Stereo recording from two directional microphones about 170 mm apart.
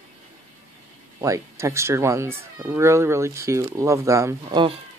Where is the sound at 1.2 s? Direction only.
15° right (ahead or behind).